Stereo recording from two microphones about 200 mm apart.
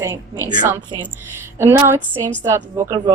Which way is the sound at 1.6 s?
10° right (ahead or behind).